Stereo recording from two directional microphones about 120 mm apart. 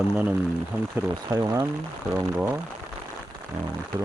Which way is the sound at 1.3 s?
25° right (ahead or behind).